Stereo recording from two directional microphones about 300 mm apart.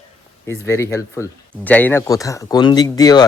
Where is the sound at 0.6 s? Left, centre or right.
Centre.